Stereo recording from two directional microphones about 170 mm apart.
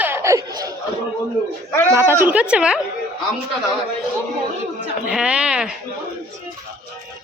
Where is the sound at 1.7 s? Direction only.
15° left (ahead or behind).